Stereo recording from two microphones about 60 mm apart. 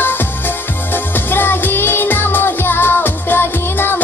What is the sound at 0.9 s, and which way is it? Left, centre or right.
Music, left.